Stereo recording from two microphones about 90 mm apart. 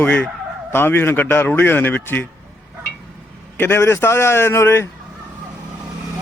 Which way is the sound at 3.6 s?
25° left (ahead or behind).